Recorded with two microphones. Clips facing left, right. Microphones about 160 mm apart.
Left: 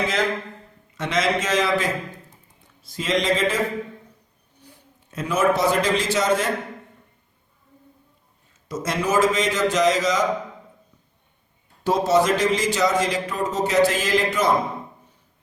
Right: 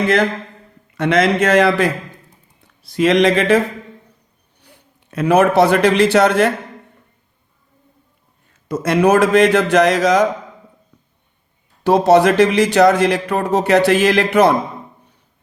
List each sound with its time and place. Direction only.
0.0 s speech: 60° right (ahead or behind)
4.6 s a man's voice: 70° right (ahead or behind)
8.6 s speech: 60° right (ahead or behind)
11.8 s speech: 65° right (ahead or behind)